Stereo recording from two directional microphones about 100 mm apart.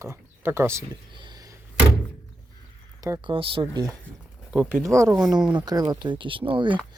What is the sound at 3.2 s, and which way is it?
Speech, 60° right (ahead or behind).